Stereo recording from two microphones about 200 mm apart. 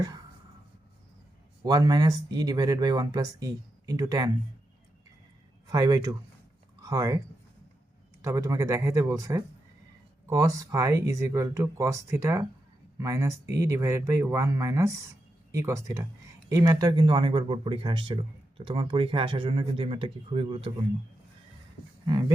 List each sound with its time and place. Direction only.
1.6 s speech: 20° right (ahead or behind)
5.6 s speech: 15° right (ahead or behind)
8.2 s speech: 15° right (ahead or behind)
22.0 s a sound: 20° right (ahead or behind)